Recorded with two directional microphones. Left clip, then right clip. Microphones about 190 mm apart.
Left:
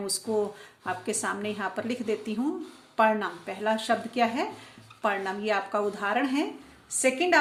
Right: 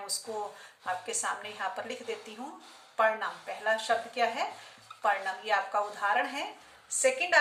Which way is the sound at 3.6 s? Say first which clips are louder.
Left 2 dB; 45° left (ahead or behind).